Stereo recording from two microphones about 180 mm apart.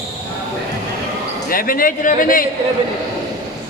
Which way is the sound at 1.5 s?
50° left (ahead or behind).